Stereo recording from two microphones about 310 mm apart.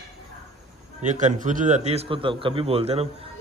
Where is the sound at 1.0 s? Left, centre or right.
Right.